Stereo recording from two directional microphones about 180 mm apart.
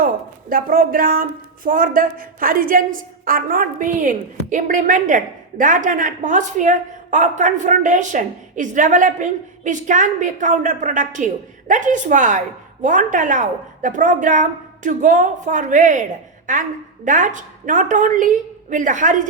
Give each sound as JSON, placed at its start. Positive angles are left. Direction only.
{"t": 0.0, "sound": "a woman's voice", "side_deg": -50}